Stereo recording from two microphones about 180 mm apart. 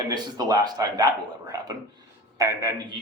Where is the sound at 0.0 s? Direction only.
20° right (ahead or behind).